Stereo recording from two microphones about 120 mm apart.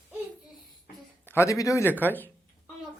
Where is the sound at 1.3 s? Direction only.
25° left (ahead or behind).